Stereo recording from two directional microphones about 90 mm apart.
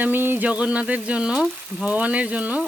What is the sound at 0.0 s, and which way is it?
Frying, 20° right (ahead or behind).